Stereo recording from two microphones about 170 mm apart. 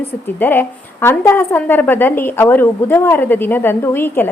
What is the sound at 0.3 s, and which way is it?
A woman's voice, 10° left (ahead or behind).